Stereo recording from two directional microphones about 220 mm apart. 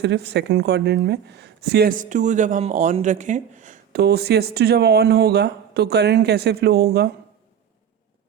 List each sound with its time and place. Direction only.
0.0 s speech: 50° right (ahead or behind); by 4.0 s 35° right (ahead or behind)
4.0 s speech: 45° right (ahead or behind)